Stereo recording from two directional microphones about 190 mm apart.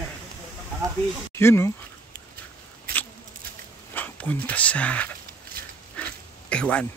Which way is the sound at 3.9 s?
10° left (ahead or behind).